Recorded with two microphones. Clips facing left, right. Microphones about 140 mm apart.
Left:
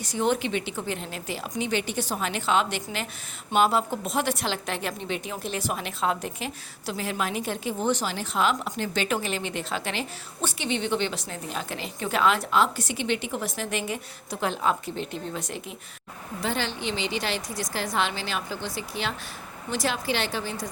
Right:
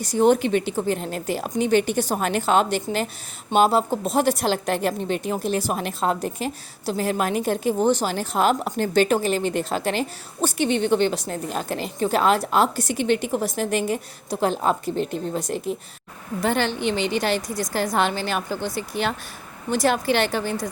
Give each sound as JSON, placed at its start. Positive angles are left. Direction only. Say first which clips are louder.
{"t": 0.0, "sound": "a woman's voice", "louder": "right 7 dB", "side_deg": -40}
{"t": 16.4, "sound": "a woman's voice", "louder": "right 7 dB", "side_deg": -55}